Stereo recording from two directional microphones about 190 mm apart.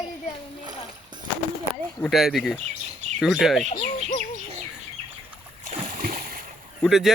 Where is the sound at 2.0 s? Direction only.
Centre (ahead or behind).